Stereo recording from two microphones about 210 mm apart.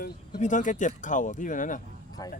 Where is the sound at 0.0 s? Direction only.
35° left (ahead or behind).